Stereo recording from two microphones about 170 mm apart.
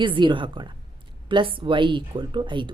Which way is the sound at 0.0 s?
30° right (ahead or behind).